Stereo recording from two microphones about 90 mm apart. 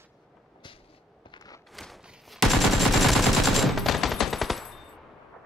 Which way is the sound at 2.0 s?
5° right (ahead or behind).